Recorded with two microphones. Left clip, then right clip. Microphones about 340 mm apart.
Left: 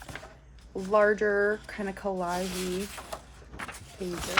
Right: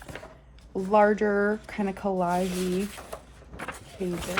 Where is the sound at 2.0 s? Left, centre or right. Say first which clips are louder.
Right 3 dB; right.